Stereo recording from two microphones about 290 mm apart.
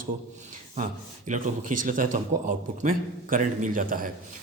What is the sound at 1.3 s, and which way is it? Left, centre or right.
A man's voice, right.